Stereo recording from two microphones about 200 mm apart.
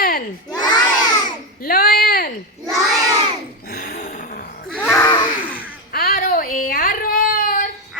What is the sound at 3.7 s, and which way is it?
Gasp, 45° left (ahead or behind).